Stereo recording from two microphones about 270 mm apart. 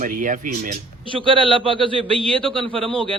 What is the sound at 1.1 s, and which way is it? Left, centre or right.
A man's voice, centre.